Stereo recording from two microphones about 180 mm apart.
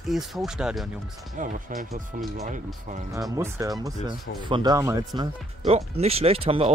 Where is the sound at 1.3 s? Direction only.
45° right (ahead or behind).